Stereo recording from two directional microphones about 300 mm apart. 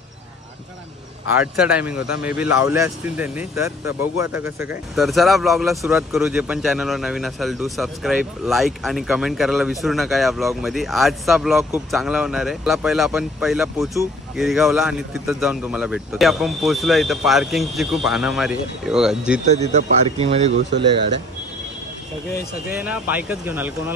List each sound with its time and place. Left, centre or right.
1.3 s speech: centre
19.4 s speech: right
22.7 s speech: centre